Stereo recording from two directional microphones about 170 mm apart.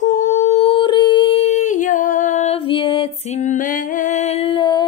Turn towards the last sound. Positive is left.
turn(degrees=25)  # may be behind; listen again after turning